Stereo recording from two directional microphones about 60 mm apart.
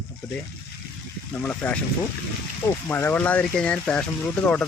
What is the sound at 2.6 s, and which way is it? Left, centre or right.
Speech, left.